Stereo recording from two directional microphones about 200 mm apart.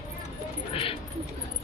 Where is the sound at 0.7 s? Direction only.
25° left (ahead or behind).